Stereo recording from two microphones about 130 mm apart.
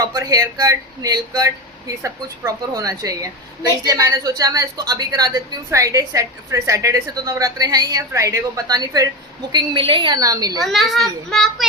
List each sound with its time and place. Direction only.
0.0 s a woman's voice: 25° right (ahead or behind)
10.6 s a woman's voice: centre (ahead or behind)